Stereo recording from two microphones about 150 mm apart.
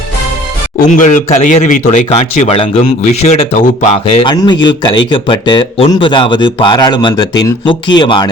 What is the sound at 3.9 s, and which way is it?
Speech, 35° left (ahead or behind).